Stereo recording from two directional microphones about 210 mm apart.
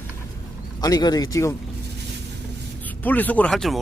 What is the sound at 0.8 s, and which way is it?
Speech, 20° left (ahead or behind).